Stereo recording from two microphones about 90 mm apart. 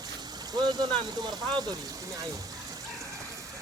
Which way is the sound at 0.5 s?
50° right (ahead or behind).